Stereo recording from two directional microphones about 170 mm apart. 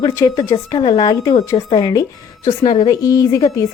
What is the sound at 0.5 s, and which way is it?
A woman's voice, 30° left (ahead or behind).